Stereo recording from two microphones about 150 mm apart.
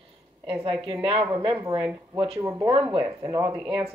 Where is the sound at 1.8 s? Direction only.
10° right (ahead or behind).